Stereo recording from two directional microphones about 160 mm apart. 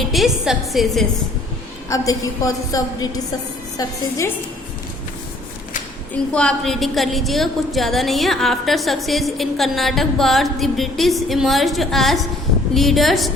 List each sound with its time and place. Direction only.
0.1 s a woman's voice: centre (ahead or behind)
1.9 s a woman's voice: 20° left (ahead or behind)
6.3 s a woman's voice: 5° left (ahead or behind)